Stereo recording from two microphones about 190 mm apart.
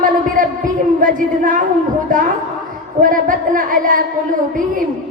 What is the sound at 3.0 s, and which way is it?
Child singing, 45° right (ahead or behind).